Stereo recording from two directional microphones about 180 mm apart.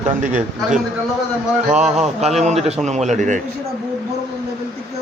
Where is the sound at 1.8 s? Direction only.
Centre (ahead or behind).